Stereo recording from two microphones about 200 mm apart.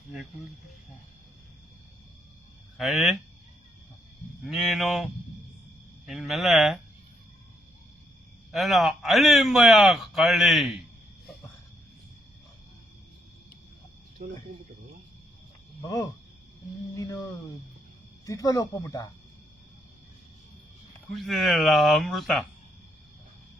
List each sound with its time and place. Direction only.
2.7 s a man's voice: centre (ahead or behind)
4.4 s a man's voice: centre (ahead or behind)
6.1 s a man's voice: centre (ahead or behind)
8.5 s a man's voice: centre (ahead or behind)
16.9 s a sound: 15° left (ahead or behind)
18.3 s speech: 15° left (ahead or behind)
21.1 s a man's voice: centre (ahead or behind)